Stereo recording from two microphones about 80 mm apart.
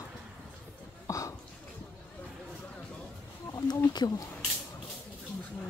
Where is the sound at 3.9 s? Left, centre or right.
Left.